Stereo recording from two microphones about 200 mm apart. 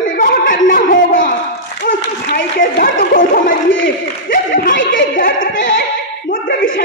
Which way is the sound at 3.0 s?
45° left (ahead or behind).